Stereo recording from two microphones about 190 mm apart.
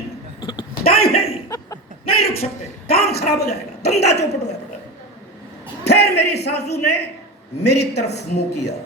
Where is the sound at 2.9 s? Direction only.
55° left (ahead or behind).